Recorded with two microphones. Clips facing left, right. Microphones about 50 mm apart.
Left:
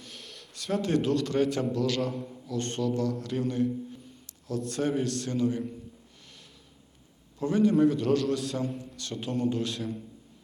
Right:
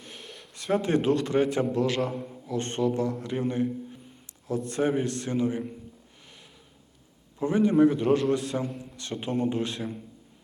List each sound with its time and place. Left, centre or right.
0.0 s a sound: centre
0.6 s a man's voice: right
2.0 s a man's voice: centre
7.3 s a man's voice: right